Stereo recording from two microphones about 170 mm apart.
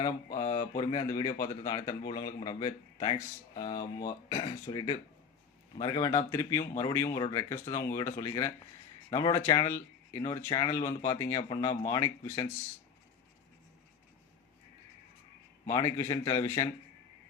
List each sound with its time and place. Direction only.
0.3 s a sound: 20° left (ahead or behind)
0.8 s speech: 25° left (ahead or behind)
15.6 s speech: 15° left (ahead or behind)